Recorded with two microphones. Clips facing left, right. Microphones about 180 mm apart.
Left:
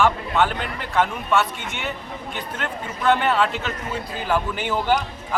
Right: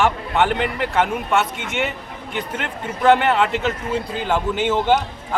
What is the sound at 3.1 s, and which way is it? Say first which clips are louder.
Speech: right 4 dB; 65° right (ahead or behind).